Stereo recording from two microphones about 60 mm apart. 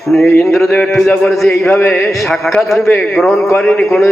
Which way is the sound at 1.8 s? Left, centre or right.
Left.